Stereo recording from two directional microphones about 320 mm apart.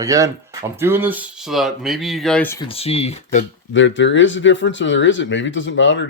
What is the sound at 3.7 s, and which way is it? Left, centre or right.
Speech, left.